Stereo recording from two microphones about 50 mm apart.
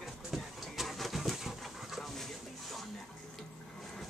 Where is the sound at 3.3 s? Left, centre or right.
Centre.